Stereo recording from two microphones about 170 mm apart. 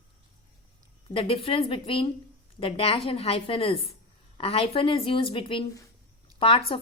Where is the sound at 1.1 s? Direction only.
35° left (ahead or behind).